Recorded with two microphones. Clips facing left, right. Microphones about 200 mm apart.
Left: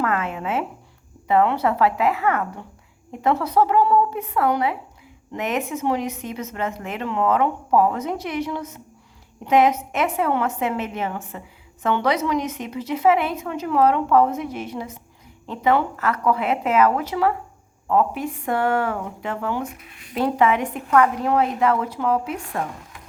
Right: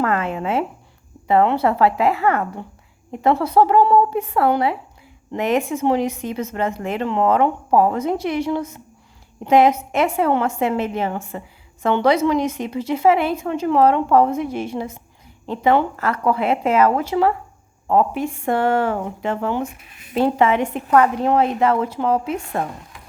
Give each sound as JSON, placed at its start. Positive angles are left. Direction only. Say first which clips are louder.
{"t": 0.0, "sound": "a woman's voice", "louder": "right 3 dB", "side_deg": -35}